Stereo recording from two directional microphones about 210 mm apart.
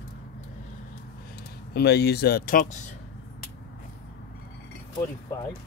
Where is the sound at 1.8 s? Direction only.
50° left (ahead or behind).